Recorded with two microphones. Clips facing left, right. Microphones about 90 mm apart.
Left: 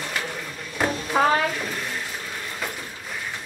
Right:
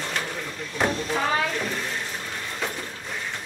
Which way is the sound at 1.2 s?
45° left (ahead or behind).